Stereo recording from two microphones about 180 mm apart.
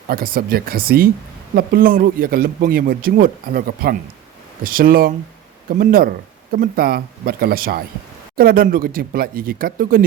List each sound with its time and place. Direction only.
0.1 s speech: 55° right (ahead or behind)